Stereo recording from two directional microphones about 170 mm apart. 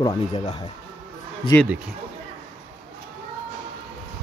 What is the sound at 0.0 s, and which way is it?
Speech, 25° left (ahead or behind).